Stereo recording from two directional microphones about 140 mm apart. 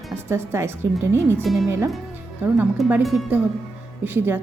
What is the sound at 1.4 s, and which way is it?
Speech, centre (ahead or behind).